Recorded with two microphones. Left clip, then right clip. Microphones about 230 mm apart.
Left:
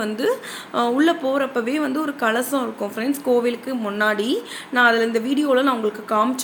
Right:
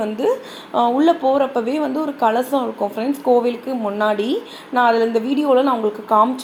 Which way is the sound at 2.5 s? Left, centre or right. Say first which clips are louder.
Right 4 dB; left.